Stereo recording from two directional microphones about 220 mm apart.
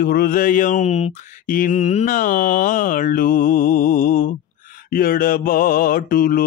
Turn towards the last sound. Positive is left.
turn(degrees=40)  # may be behind; listen again after turning